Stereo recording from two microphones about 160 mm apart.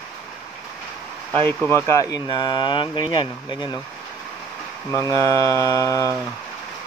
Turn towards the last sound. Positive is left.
turn(degrees=20)  # may be behind; listen again after turning